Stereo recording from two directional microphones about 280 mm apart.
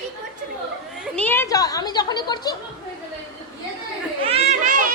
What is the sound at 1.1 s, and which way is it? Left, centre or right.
Speech, centre.